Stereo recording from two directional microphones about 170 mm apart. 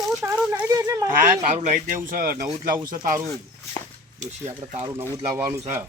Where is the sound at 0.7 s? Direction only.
20° right (ahead or behind).